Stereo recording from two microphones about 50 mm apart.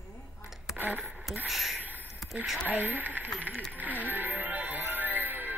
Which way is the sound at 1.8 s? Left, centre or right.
Right.